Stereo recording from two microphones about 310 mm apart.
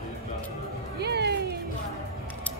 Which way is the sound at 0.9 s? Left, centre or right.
Right.